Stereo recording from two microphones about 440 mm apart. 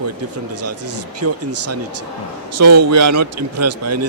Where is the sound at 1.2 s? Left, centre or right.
Right.